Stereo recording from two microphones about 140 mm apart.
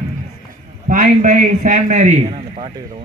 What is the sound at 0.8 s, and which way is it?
A man's voice, 70° right (ahead or behind).